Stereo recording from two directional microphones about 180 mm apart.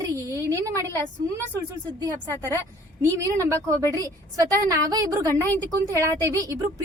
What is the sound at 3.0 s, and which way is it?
A woman's voice, 15° right (ahead or behind).